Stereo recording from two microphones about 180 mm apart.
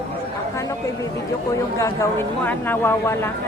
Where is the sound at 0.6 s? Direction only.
20° left (ahead or behind).